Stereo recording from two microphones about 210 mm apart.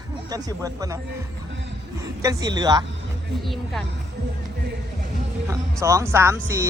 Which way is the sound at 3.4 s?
Centre (ahead or behind).